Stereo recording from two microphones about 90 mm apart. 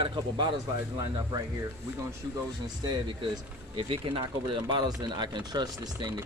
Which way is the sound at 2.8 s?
45° right (ahead or behind).